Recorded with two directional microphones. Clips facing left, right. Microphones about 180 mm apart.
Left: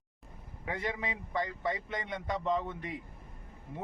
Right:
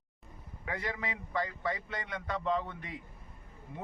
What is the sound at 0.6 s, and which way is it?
A man's voice, 25° left (ahead or behind).